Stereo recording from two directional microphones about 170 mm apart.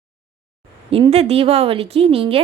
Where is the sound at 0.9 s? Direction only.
35° right (ahead or behind).